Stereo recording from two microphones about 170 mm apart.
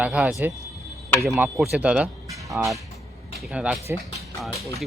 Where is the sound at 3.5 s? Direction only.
5° right (ahead or behind).